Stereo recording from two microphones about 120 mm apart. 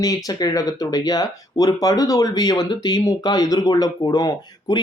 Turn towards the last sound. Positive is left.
turn(degrees=30)  # may be behind; listen again after turning